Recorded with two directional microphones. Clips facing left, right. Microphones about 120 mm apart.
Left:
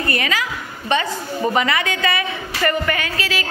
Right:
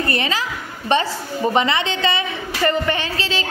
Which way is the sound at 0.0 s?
30° right (ahead or behind).